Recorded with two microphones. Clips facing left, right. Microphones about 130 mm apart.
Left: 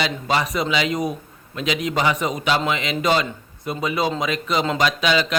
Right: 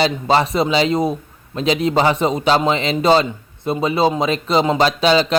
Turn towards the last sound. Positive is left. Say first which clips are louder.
# right 5 dB
turn(degrees=-30)  # may be behind; listen again after turning